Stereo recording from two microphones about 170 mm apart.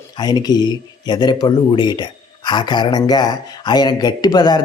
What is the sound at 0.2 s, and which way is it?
Speech, 25° left (ahead or behind).